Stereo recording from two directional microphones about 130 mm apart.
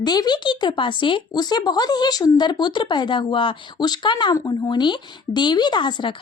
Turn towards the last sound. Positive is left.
turn(degrees=35)  # may be behind; listen again after turning